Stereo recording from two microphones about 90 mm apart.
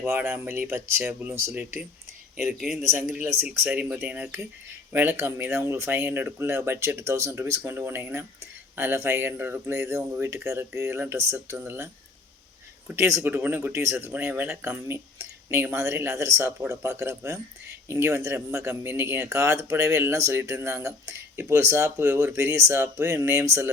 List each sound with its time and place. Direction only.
0.0 s speech: 25° right (ahead or behind)
2.8 s speech: 25° right (ahead or behind)
4.0 s speech: 15° right (ahead or behind)
5.1 s speech: 30° right (ahead or behind)
13.0 s speech: 30° right (ahead or behind)